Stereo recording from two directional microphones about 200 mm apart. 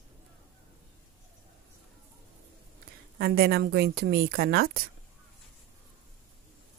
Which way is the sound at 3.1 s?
50° right (ahead or behind).